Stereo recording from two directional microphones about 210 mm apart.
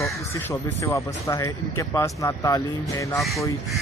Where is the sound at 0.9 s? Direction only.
15° left (ahead or behind).